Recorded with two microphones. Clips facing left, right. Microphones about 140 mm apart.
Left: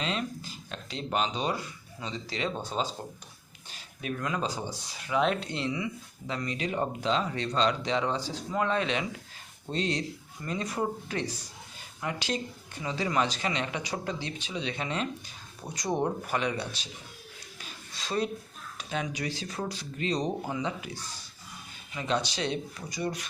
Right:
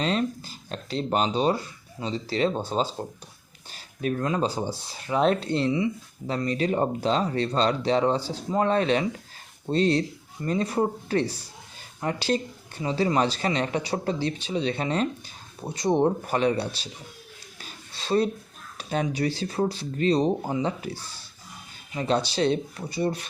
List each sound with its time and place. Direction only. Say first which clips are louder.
0.0 s speech: right 7 dB; 40° right (ahead or behind)
17.6 s a sound: right 2 dB; 30° right (ahead or behind)
18.8 s speech: right 7 dB; 35° right (ahead or behind)